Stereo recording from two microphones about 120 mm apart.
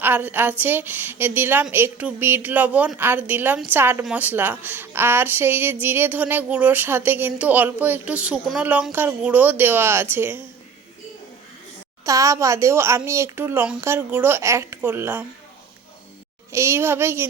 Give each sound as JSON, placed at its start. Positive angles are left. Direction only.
{"t": 0.0, "sound": "speech", "side_deg": -15}
{"t": 12.0, "sound": "speech", "side_deg": -25}
{"t": 16.5, "sound": "speech", "side_deg": -20}